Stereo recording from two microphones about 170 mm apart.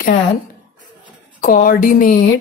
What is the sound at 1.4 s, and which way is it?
Speech, 55° left (ahead or behind).